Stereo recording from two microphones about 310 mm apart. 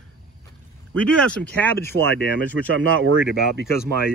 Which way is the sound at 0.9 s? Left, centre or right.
Centre.